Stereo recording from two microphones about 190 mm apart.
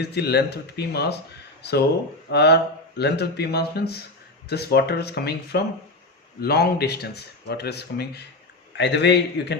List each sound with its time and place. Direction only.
0.0 s speech: 60° left (ahead or behind)